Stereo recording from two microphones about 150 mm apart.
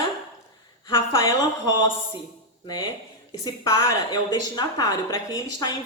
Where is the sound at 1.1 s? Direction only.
20° left (ahead or behind).